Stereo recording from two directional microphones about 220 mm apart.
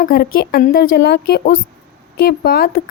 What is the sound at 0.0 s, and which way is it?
A woman's voice, 40° left (ahead or behind).